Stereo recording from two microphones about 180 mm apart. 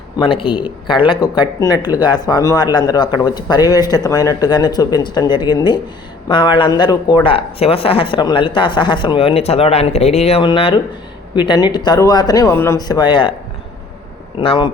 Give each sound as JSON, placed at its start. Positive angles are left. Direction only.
{"t": 0.2, "sound": "speech", "side_deg": 30}
{"t": 14.3, "sound": "speech", "side_deg": 30}